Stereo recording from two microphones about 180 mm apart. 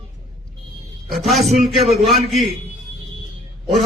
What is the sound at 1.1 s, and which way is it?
Speech, centre (ahead or behind).